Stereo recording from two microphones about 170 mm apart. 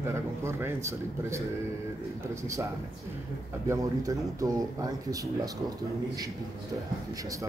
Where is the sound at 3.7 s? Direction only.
20° right (ahead or behind).